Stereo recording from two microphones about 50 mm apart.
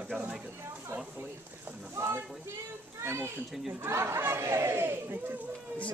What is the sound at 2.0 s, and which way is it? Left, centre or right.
Speech, right.